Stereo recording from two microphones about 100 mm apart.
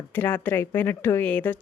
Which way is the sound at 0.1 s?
15° left (ahead or behind).